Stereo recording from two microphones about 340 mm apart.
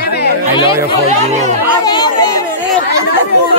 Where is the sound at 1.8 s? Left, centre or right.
Centre.